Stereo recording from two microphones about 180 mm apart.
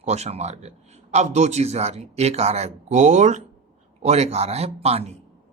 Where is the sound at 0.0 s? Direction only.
35° right (ahead or behind).